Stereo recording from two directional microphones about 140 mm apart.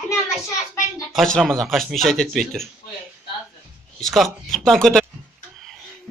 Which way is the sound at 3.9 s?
Centre (ahead or behind).